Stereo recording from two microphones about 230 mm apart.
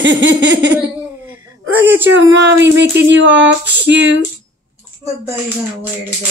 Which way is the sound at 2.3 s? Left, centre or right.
Right.